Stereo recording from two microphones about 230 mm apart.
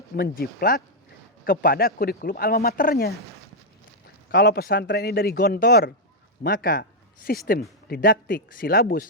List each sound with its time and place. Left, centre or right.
0.2 s speech: left
4.3 s speech: left